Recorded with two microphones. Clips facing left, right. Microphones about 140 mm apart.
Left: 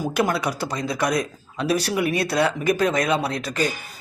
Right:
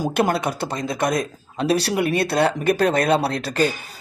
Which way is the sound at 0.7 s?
50° right (ahead or behind).